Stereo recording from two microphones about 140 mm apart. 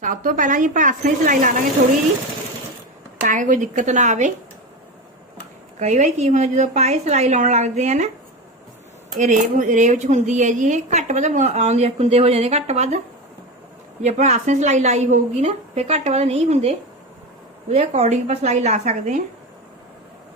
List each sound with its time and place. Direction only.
0.0 s a woman's voice: 75° right (ahead or behind)
3.2 s a woman's voice: 65° right (ahead or behind)
5.8 s a woman's voice: 55° right (ahead or behind)
9.1 s a woman's voice: 65° right (ahead or behind)
14.0 s a woman's voice: 55° right (ahead or behind)